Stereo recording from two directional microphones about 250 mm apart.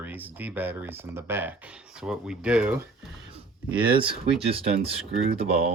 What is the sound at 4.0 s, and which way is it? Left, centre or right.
Speech, right.